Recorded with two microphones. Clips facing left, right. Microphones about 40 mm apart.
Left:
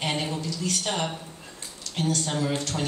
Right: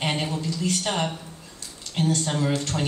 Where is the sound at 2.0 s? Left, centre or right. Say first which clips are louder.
Right 3 dB; right.